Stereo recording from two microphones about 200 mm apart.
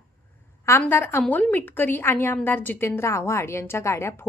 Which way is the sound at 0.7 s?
10° left (ahead or behind).